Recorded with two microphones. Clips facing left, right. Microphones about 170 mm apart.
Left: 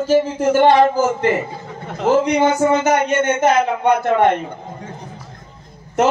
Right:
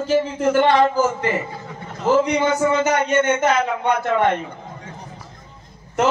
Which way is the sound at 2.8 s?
45° left (ahead or behind).